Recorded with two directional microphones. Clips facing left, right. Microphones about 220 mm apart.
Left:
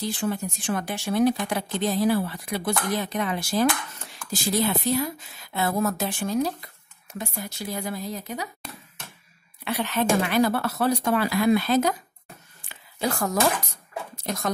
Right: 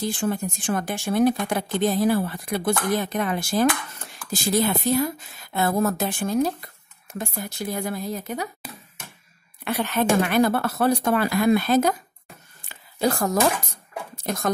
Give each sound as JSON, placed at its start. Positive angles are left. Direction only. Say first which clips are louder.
{"t": 0.0, "sound": "speech", "louder": "right 2 dB", "side_deg": -50}
{"t": 9.7, "sound": "speech", "louder": "right 2 dB", "side_deg": -50}
{"t": 12.6, "sound": "a sound", "louder": "right 5 dB", "side_deg": -40}
{"t": 14.2, "sound": "speech", "louder": "right 3 dB", "side_deg": -50}